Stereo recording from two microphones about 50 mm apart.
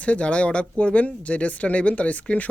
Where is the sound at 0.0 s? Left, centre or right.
Left.